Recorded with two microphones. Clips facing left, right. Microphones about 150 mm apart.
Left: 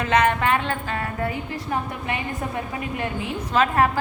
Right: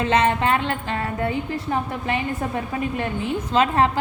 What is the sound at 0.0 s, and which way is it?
A woman's voice, 30° right (ahead or behind).